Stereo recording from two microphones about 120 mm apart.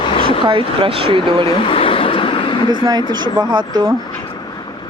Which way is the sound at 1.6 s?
50° left (ahead or behind).